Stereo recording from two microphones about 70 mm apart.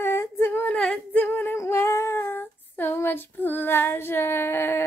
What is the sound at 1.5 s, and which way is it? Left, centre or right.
Female singing, left.